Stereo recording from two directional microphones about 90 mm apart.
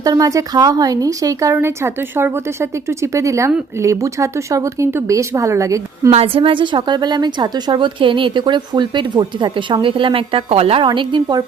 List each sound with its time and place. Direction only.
0.0 s speech: 40° right (ahead or behind)
1.5 s speech: 25° right (ahead or behind)
6.1 s a woman's voice: 90° right; by 11.3 s 65° right (ahead or behind)